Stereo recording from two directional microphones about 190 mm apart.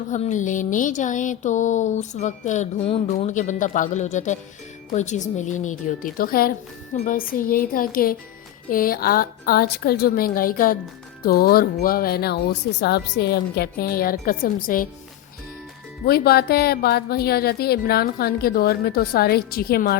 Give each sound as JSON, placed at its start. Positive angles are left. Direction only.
{"t": 0.1, "sound": "a woman's voice", "side_deg": 40}
{"t": 16.0, "sound": "a woman's voice", "side_deg": 55}